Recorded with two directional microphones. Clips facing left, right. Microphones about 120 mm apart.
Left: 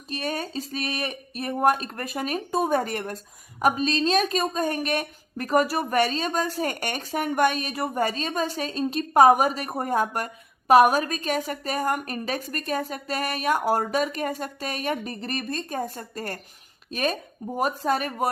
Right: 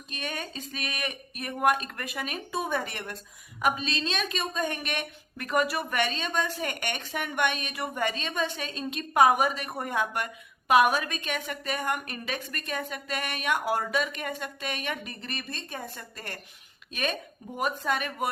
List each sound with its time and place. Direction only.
0.1 s a woman's voice: 35° left (ahead or behind)